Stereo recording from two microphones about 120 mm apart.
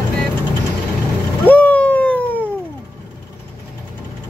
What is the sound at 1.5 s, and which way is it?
Vehicle, 10° left (ahead or behind).